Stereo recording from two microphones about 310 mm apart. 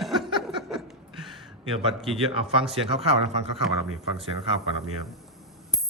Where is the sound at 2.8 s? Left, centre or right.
Centre.